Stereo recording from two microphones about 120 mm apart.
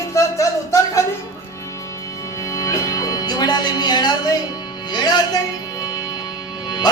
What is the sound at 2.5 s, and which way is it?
Music, 30° left (ahead or behind).